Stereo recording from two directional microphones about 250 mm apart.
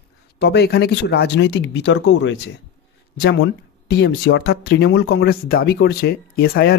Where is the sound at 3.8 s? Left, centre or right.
Left.